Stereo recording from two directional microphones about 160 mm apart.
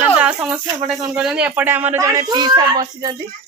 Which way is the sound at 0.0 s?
10° right (ahead or behind).